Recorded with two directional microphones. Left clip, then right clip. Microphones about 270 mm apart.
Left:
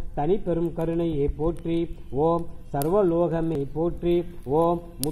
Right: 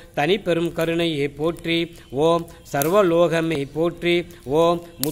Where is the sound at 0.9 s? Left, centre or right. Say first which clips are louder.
Right 3 dB; right.